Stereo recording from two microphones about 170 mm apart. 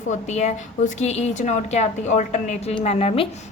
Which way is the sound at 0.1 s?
40° left (ahead or behind).